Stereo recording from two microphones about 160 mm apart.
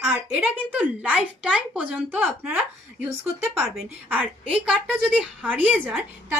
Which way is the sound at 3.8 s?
10° right (ahead or behind).